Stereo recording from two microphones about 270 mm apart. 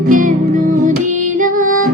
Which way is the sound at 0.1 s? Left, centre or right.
Right.